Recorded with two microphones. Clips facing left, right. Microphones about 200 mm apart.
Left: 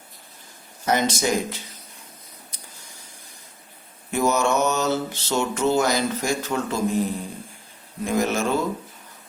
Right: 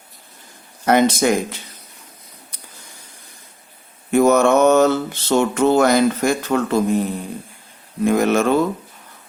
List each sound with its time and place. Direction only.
0.9 s mantra: 60° right (ahead or behind)
4.1 s mantra: 55° right (ahead or behind)
8.0 s mantra: 60° right (ahead or behind)